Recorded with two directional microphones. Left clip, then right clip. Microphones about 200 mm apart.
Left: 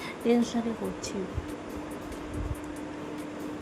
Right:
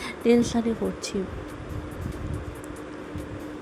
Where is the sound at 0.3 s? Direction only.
20° right (ahead or behind).